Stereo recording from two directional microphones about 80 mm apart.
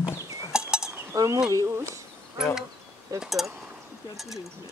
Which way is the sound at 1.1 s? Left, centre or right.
Right.